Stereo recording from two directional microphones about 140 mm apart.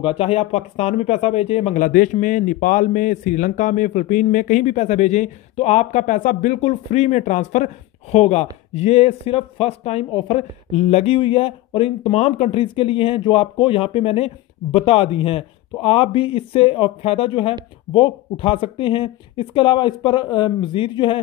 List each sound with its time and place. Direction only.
0.0 s speech: 45° left (ahead or behind)
1.8 s a man's voice: 80° left; by 21.2 s 35° left (ahead or behind)